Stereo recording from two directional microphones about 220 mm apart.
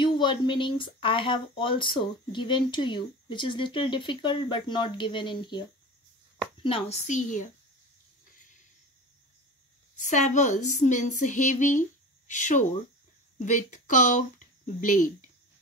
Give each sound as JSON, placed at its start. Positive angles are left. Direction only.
{"t": 0.0, "sound": "speech", "side_deg": 20}
{"t": 10.0, "sound": "speech", "side_deg": 35}